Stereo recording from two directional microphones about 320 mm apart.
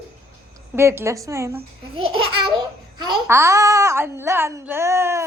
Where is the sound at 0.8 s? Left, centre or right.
Centre.